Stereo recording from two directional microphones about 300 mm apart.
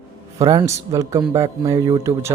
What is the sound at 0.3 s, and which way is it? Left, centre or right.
Speech, centre.